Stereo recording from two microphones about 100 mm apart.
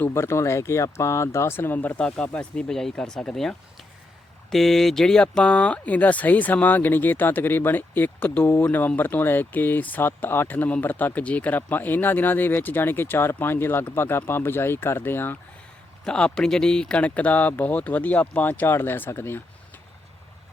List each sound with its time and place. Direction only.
0.0 s speech: 25° left (ahead or behind)
16.0 s speech: 10° left (ahead or behind); by 19.4 s 25° left (ahead or behind)